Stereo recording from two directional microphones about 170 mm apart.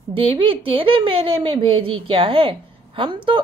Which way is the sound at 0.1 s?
30° right (ahead or behind).